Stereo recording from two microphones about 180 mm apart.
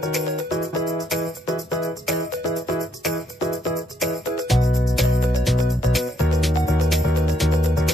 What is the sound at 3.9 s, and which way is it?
Music, centre (ahead or behind).